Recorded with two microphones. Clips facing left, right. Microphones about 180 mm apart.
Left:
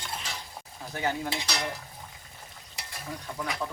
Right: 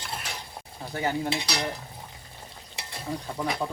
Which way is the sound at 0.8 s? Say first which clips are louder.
Right 3 dB; 25° right (ahead or behind).